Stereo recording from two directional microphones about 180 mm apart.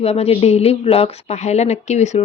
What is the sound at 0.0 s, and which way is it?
A woman's voice, 35° left (ahead or behind).